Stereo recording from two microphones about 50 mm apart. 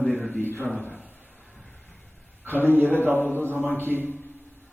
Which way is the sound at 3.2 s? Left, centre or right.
Left.